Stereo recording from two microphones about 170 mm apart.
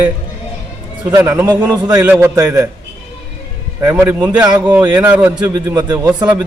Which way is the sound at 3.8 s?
10° right (ahead or behind).